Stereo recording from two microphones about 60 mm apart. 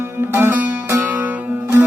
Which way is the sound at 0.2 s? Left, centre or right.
Right.